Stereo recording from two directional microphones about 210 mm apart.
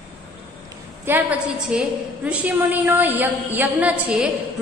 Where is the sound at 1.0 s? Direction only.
10° right (ahead or behind).